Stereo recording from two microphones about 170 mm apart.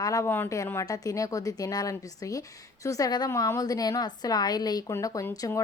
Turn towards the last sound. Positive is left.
turn(degrees=20)  # may be behind; listen again after turning